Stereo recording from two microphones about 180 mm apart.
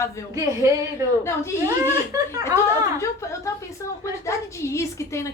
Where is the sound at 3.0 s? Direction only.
15° left (ahead or behind).